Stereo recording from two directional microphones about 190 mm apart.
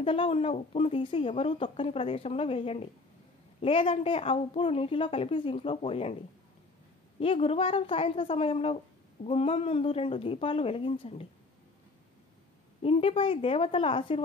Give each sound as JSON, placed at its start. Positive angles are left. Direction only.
{"t": 0.0, "sound": "a woman's voice", "side_deg": 30}
{"t": 7.2, "sound": "a woman's voice", "side_deg": 30}
{"t": 12.8, "sound": "a woman's voice", "side_deg": 30}